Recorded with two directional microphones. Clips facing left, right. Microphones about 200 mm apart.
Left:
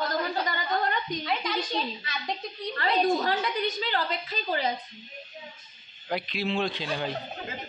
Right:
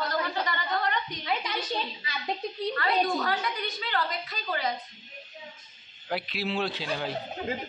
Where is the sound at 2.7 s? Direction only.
30° left (ahead or behind).